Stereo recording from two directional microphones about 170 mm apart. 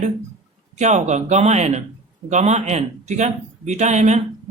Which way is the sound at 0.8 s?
45° right (ahead or behind).